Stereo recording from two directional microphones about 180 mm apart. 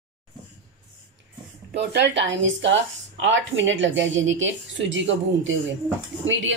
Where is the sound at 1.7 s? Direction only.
70° right (ahead or behind).